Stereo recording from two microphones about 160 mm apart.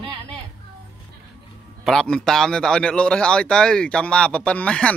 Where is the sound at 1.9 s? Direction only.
5° left (ahead or behind).